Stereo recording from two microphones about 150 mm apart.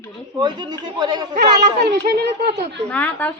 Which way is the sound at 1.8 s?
90° right.